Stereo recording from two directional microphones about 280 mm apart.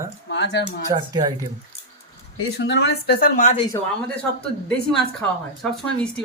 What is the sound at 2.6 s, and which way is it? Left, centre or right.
A woman's voice, left.